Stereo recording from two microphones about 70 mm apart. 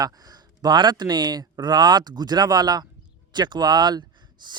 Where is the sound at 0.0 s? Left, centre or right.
Right.